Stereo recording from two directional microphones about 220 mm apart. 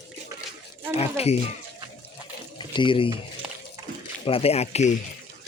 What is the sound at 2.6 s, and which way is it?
Speech, 20° left (ahead or behind).